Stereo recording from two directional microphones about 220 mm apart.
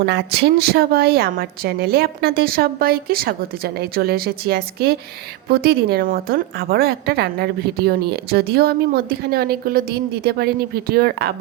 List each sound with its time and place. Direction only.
0.0 s a woman's voice: 50° right (ahead or behind)